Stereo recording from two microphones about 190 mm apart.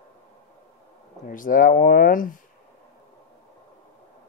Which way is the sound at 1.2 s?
45° left (ahead or behind).